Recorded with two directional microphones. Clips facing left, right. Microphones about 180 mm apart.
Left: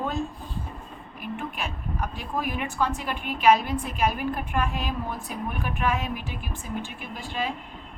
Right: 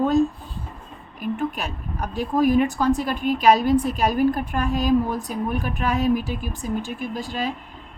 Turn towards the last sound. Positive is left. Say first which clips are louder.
# right 5 dB
turn(degrees=-40)  # may be behind; listen again after turning